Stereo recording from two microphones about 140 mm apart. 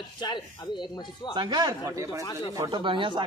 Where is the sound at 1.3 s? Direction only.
35° right (ahead or behind).